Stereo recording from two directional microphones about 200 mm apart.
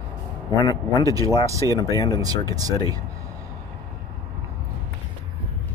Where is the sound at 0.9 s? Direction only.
15° right (ahead or behind).